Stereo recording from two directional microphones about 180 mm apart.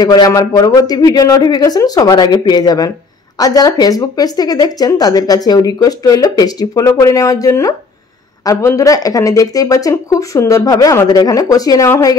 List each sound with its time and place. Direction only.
0.0 s speech: 20° left (ahead or behind)